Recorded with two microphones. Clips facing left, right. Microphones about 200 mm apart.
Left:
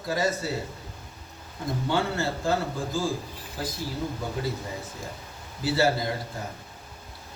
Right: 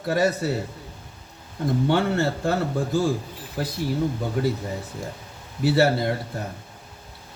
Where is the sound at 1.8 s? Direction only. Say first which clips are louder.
Right 4 dB; 65° right (ahead or behind).